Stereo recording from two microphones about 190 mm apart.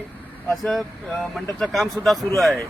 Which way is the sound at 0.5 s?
Centre (ahead or behind).